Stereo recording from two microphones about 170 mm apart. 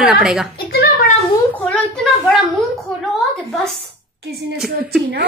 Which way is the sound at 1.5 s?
5° left (ahead or behind).